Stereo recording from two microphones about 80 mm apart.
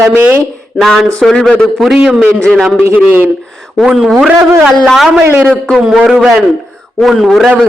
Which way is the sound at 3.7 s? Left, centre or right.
Centre.